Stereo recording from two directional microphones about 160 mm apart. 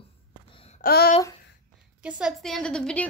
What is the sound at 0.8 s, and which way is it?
Babbling, 70° left (ahead or behind).